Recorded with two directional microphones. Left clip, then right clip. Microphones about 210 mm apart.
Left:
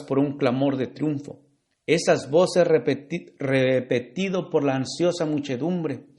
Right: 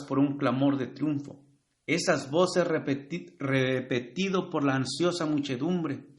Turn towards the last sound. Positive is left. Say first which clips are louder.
# left 4 dB
turn(degrees=20)  # may be behind; listen again after turning